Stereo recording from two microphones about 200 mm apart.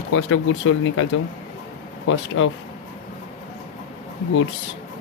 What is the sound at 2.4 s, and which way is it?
Speech, 70° left (ahead or behind).